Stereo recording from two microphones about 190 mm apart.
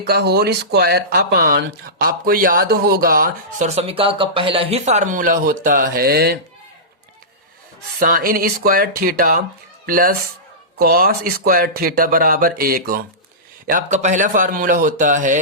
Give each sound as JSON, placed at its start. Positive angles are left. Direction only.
{"t": 0.1, "sound": "speech", "side_deg": -55}
{"t": 7.9, "sound": "speech", "side_deg": -50}